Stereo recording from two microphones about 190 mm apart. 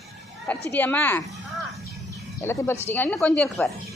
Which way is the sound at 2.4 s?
15° left (ahead or behind).